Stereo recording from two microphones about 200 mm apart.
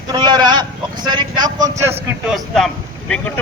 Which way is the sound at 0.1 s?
20° right (ahead or behind).